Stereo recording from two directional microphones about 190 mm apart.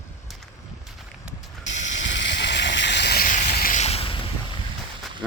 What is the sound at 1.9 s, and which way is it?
Vehicle, 70° left (ahead or behind).